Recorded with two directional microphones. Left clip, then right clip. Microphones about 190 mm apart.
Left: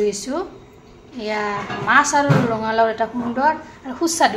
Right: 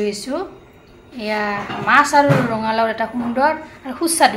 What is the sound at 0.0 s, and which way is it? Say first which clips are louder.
Speech: left 1 dB; centre (ahead or behind).